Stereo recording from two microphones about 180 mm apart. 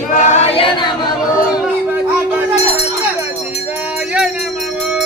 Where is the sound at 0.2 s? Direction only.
40° left (ahead or behind).